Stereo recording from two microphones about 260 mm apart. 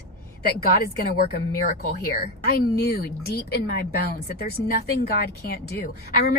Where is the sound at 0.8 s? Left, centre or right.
Left.